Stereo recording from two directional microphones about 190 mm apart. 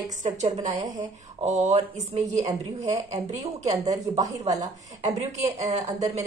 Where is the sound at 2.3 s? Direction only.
20° right (ahead or behind).